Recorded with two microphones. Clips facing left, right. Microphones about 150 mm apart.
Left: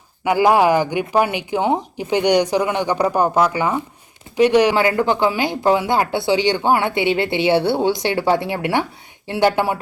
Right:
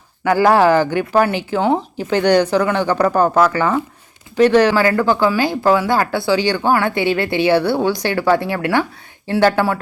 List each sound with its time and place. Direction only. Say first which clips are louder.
0.3 s speech: right 2 dB; 15° left (ahead or behind)